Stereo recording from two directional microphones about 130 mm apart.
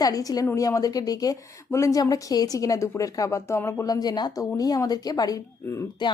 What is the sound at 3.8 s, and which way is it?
Speech, 30° left (ahead or behind).